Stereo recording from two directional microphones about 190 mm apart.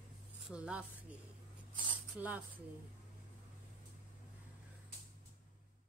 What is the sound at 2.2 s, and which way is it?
Speech, 10° right (ahead or behind).